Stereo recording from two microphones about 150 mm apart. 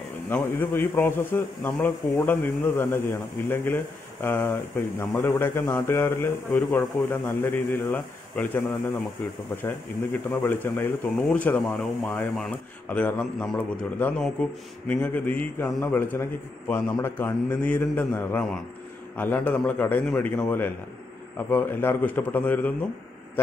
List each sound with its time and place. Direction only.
0.3 s a man's voice: 15° left (ahead or behind)